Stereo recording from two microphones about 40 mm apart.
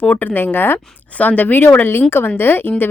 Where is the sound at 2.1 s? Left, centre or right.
Left.